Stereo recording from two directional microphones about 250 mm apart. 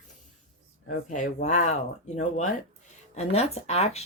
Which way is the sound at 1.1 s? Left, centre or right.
Left.